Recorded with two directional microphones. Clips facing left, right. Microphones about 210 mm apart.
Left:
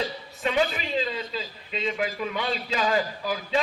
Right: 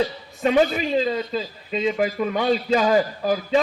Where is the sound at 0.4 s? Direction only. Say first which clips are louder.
Right 7 dB; 45° right (ahead or behind).